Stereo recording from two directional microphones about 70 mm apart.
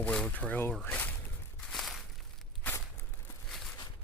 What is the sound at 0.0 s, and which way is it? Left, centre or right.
Speech, centre.